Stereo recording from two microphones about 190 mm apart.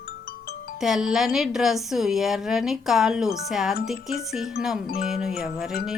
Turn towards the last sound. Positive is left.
turn(degrees=0)  # may be behind; listen again after turning